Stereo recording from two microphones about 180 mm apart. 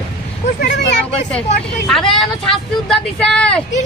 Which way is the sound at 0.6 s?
70° left (ahead or behind).